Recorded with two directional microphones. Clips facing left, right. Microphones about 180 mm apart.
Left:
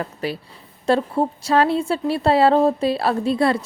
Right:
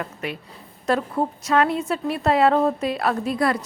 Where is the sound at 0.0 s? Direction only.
35° left (ahead or behind).